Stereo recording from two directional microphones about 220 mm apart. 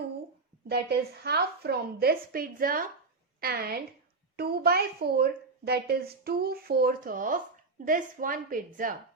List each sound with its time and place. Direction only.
0.7 s a woman's voice: 45° right (ahead or behind)